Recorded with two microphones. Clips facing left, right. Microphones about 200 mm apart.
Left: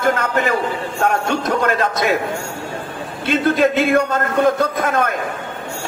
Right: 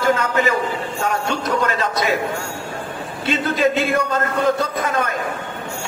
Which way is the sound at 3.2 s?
55° left (ahead or behind).